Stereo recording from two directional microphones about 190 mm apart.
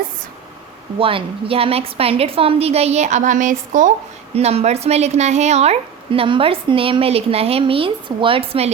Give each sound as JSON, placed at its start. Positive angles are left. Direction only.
{"t": 0.9, "sound": "a woman's voice", "side_deg": -30}